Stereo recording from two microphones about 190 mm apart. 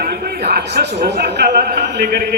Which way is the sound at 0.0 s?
50° right (ahead or behind).